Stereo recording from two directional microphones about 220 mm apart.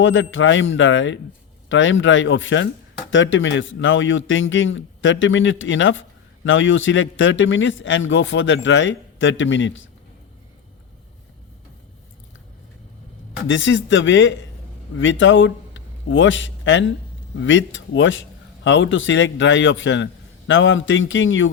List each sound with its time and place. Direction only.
0.0 s speech: 60° left (ahead or behind)
13.5 s a man's voice: 60° left (ahead or behind)